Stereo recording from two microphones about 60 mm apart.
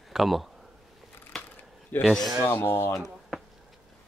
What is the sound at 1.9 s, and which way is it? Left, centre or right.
Speech, left.